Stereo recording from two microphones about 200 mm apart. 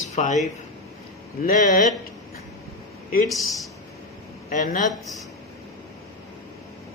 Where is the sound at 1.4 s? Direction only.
45° left (ahead or behind).